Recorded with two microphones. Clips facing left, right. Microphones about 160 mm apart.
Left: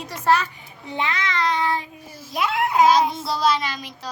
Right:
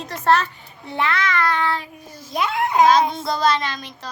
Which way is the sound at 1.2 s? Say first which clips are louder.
Even; 20° left (ahead or behind).